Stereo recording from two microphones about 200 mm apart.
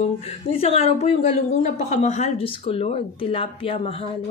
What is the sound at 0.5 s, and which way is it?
Speech, 30° left (ahead or behind).